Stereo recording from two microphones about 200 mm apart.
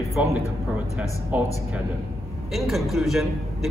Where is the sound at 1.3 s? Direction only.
10° right (ahead or behind).